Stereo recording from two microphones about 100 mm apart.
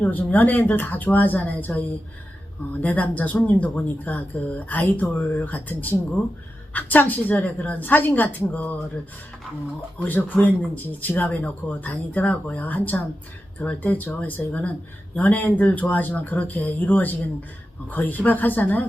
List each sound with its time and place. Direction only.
0.0 s speech: 15° left (ahead or behind)
2.8 s speech: 15° left (ahead or behind)
10.0 s speech: 20° left (ahead or behind)